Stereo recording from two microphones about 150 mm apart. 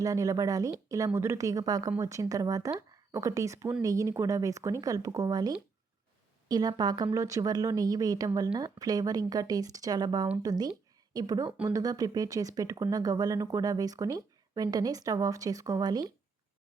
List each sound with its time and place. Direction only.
0.0 s speech: 25° right (ahead or behind)